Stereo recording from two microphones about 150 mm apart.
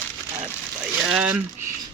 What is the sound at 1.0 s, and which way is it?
Speech, 5° right (ahead or behind).